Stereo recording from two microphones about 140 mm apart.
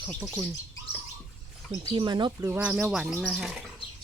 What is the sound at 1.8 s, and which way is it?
Speech, 30° right (ahead or behind).